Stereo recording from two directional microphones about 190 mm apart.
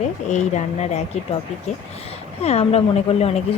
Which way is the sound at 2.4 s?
30° left (ahead or behind).